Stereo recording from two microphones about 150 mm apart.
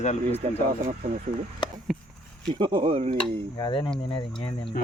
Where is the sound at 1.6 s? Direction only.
30° left (ahead or behind).